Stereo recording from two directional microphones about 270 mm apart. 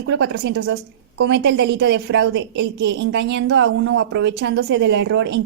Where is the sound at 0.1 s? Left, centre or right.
Right.